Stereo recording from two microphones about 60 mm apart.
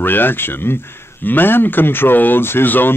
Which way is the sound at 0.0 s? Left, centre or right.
Left.